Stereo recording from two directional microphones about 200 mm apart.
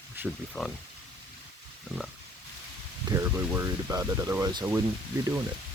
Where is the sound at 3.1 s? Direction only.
15° right (ahead or behind).